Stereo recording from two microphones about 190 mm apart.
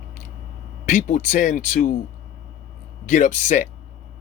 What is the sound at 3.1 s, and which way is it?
Speech, 40° left (ahead or behind).